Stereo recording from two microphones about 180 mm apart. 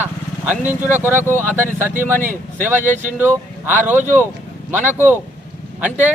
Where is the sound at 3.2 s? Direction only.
10° right (ahead or behind).